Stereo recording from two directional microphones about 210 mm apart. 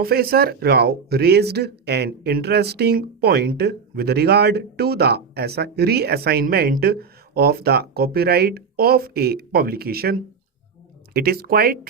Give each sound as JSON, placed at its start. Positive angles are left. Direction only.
{"t": 0.0, "sound": "speech", "side_deg": -45}